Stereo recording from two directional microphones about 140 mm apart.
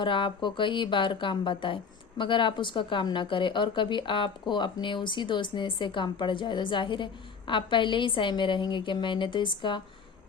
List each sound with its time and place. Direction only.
0.0 s speech: 35° left (ahead or behind)